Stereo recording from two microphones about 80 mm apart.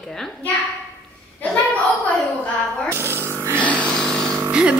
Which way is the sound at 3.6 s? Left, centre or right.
Centre.